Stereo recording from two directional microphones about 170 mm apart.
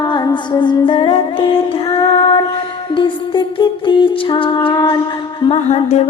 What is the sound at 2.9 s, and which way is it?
Music, 30° left (ahead or behind).